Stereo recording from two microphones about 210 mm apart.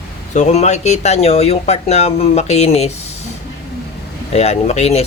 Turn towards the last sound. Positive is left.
turn(degrees=30)  # may be behind; listen again after turning